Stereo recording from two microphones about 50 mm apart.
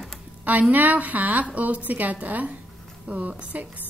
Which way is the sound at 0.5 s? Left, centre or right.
Right.